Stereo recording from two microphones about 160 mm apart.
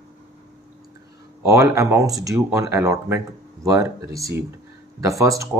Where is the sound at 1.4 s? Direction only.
20° right (ahead or behind).